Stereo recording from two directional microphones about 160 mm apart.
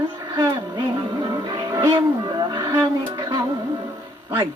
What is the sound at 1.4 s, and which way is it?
Music, 25° right (ahead or behind).